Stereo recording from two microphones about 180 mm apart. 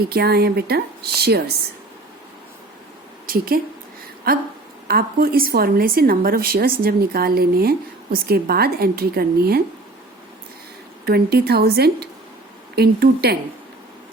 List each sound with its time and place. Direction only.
0.1 s speech: 60° right (ahead or behind)
3.2 s a woman's voice: 55° right (ahead or behind)
11.0 s speech: 60° right (ahead or behind)